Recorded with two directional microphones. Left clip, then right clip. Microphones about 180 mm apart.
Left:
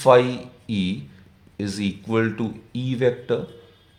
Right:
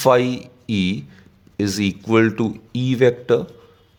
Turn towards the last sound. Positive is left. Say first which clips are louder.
# right 6 dB
turn(degrees=-55)  # may be behind; listen again after turning